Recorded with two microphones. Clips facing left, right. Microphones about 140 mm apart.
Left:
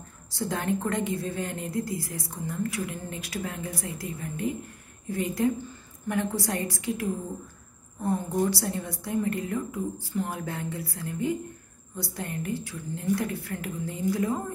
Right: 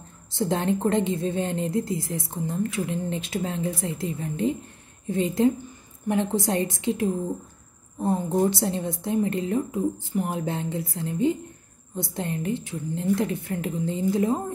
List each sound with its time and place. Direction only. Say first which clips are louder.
0.3 s a woman's voice: right 4 dB; 25° right (ahead or behind)